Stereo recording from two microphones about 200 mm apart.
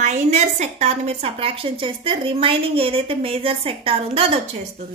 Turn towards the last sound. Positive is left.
turn(degrees=-30)  # may be behind; listen again after turning